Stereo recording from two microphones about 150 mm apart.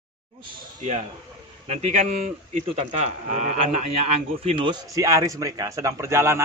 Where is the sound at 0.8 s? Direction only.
50° right (ahead or behind).